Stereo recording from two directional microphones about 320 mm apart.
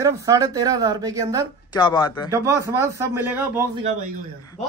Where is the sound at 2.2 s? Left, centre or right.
Centre.